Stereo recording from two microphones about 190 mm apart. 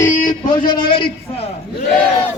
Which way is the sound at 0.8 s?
50° left (ahead or behind).